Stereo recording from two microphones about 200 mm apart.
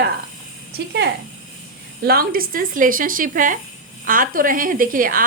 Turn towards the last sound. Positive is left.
turn(degrees=-45)  # may be behind; listen again after turning